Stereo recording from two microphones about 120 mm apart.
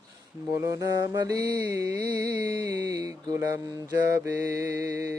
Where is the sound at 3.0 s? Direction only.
30° right (ahead or behind).